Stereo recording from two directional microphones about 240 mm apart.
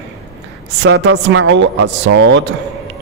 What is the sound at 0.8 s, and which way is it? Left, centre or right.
Speech, right.